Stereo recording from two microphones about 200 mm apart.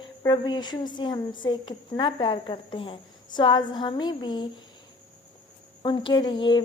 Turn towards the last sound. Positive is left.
turn(degrees=25)  # may be behind; listen again after turning